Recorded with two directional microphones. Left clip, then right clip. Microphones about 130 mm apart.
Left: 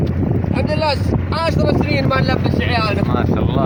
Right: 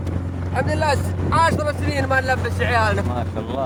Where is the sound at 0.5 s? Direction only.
40° right (ahead or behind).